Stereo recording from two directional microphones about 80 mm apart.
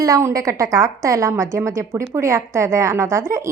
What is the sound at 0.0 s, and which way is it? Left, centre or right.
A woman's voice, right.